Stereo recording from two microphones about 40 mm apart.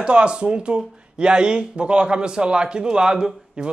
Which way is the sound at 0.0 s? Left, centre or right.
Right.